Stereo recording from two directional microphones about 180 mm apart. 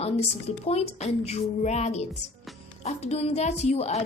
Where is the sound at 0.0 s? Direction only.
35° left (ahead or behind).